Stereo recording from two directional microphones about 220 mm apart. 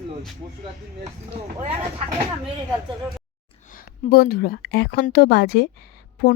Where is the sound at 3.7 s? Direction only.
40° left (ahead or behind).